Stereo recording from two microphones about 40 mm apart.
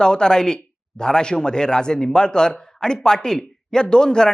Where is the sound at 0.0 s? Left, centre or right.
Centre.